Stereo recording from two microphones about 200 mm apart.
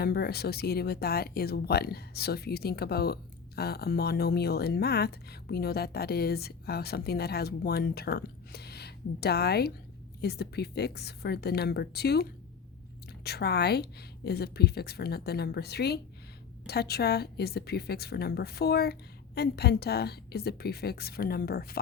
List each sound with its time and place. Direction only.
0.0 s speech: 50° left (ahead or behind)